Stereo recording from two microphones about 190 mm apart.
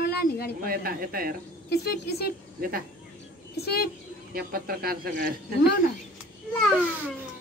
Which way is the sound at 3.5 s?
55° left (ahead or behind).